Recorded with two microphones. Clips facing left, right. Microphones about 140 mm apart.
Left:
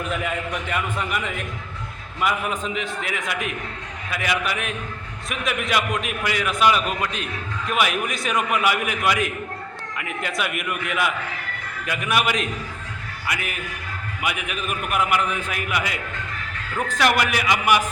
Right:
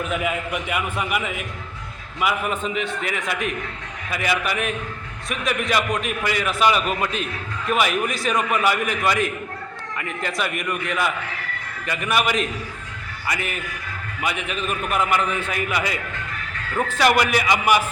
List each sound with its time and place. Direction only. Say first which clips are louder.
0.1 s a man's voice: right 2 dB; 5° right (ahead or behind)